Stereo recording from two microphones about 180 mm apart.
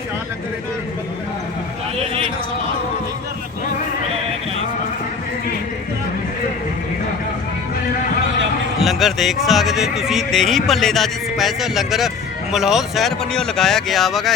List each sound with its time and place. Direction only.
8.8 s speech: centre (ahead or behind)